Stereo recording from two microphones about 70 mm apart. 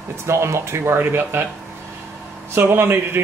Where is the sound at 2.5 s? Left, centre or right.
Right.